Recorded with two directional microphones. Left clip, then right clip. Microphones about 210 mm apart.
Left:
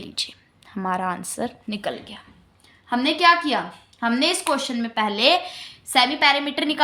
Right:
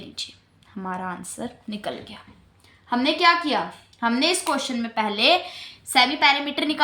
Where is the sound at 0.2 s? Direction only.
40° left (ahead or behind).